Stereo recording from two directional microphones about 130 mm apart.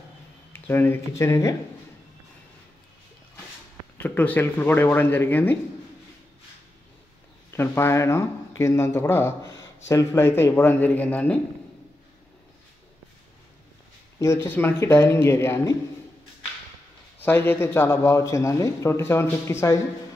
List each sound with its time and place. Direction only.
0.5 s speech: 15° left (ahead or behind)
4.0 s speech: 15° left (ahead or behind)
7.5 s speech: 20° left (ahead or behind)
14.2 s speech: 20° left (ahead or behind)
17.2 s speech: 15° left (ahead or behind)